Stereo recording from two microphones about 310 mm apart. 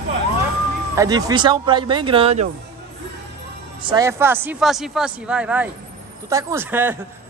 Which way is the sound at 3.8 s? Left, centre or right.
Centre.